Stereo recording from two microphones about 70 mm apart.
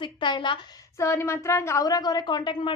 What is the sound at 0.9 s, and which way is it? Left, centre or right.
Speech, left.